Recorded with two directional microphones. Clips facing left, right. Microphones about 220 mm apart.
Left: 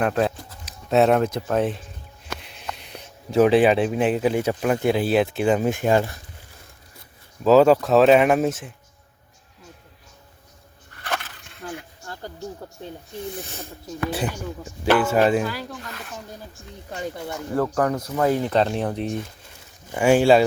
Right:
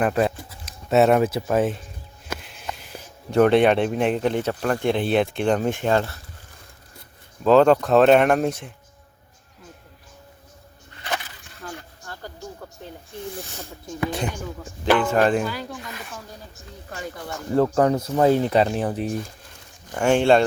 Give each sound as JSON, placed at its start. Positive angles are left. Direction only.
{"t": 0.0, "sound": "speech", "side_deg": -5}
{"t": 7.4, "sound": "speech", "side_deg": 5}
{"t": 14.1, "sound": "speech", "side_deg": 5}
{"t": 17.6, "sound": "speech", "side_deg": -25}
{"t": 18.5, "sound": "speech", "side_deg": -5}
{"t": 19.9, "sound": "speech", "side_deg": 5}